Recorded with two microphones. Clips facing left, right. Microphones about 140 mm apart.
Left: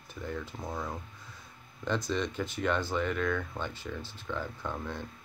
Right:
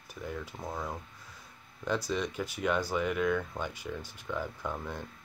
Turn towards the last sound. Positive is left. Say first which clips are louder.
# even
turn(degrees=-10)  # may be behind; listen again after turning